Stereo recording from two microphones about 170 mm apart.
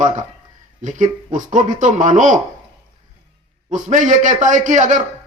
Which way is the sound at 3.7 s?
50° right (ahead or behind).